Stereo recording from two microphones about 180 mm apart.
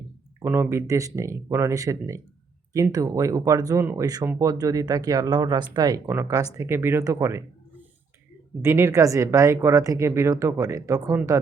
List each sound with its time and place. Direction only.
0.3 s speech: 10° right (ahead or behind)
8.6 s speech: 15° right (ahead or behind)